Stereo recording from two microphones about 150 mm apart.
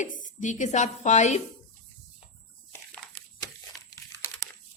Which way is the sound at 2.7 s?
10° left (ahead or behind).